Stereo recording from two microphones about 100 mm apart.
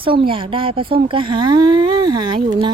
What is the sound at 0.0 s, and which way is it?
Speech, 60° right (ahead or behind).